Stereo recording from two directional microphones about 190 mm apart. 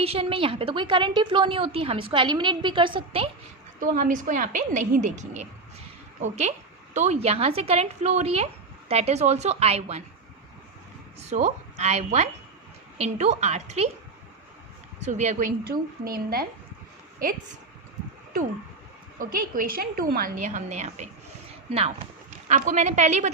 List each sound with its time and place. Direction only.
0.0 s a woman's voice: 30° right (ahead or behind)
3.8 s a woman's voice: 45° right (ahead or behind)
11.3 s a woman's voice: 35° right (ahead or behind)
15.0 s a woman's voice: 35° right (ahead or behind)
19.2 s a woman's voice: 50° right (ahead or behind)